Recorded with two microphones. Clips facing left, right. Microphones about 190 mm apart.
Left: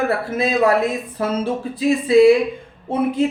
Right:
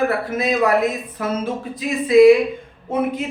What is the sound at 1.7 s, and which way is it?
Speech, 30° left (ahead or behind).